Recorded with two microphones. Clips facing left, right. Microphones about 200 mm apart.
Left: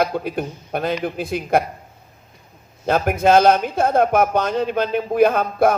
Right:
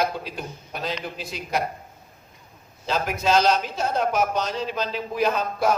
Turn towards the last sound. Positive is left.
turn(degrees=55)  # may be behind; listen again after turning